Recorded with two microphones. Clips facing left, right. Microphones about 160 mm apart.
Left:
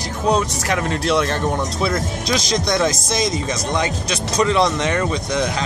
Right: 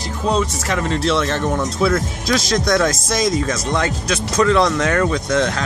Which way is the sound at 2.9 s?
55° right (ahead or behind).